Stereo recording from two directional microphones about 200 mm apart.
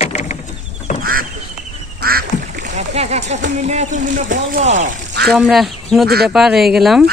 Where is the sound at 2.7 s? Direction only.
35° right (ahead or behind).